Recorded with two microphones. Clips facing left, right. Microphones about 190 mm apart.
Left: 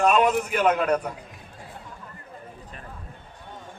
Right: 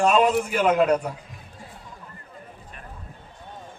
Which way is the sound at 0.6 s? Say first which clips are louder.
Right 2 dB; 10° right (ahead or behind).